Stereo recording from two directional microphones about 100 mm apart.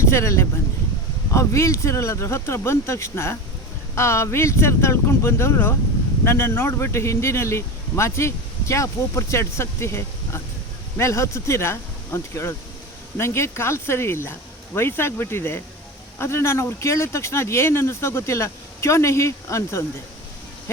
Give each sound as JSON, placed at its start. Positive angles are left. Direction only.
{"t": 0.0, "sound": "speech", "side_deg": 30}